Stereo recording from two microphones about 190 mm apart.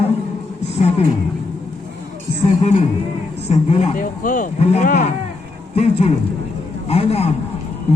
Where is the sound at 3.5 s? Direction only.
35° left (ahead or behind).